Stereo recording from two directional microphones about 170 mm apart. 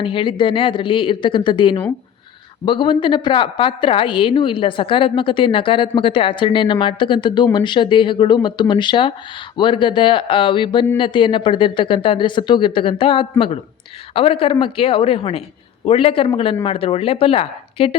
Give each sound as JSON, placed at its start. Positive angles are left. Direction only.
{"t": 0.0, "sound": "a woman's voice", "side_deg": 30}